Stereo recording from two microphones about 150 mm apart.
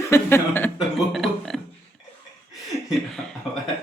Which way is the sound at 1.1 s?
Centre (ahead or behind).